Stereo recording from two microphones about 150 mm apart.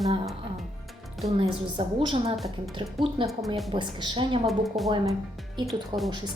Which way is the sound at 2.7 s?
35° right (ahead or behind).